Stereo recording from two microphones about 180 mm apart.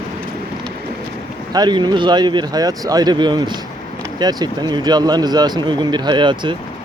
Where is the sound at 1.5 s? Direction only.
25° right (ahead or behind).